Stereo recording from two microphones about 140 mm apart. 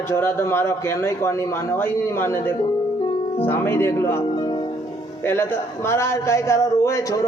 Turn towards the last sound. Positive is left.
turn(degrees=25)  # may be behind; listen again after turning